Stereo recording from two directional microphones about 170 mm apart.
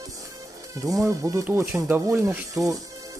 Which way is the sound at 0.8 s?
20° right (ahead or behind).